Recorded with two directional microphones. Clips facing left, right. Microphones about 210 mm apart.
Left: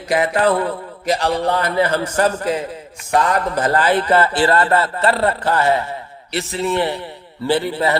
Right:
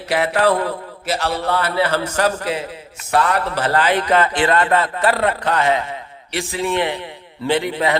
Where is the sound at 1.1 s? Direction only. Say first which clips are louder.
Left 3 dB; 15° left (ahead or behind).